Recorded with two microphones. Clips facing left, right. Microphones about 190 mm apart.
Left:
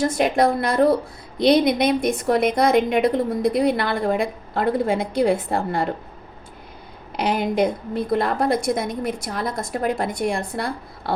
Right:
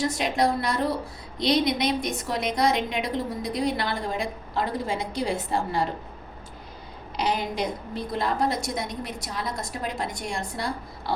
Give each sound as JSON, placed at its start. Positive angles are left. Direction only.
{"t": 0.0, "sound": "a woman's voice", "side_deg": 55}
{"t": 7.2, "sound": "a woman's voice", "side_deg": 55}